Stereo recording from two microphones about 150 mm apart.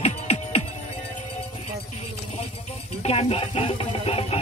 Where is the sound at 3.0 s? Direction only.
45° left (ahead or behind).